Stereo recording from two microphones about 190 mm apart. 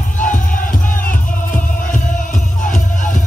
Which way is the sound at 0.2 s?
45° left (ahead or behind).